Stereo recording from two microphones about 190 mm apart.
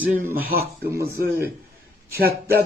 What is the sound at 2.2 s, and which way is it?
Speech, 55° right (ahead or behind).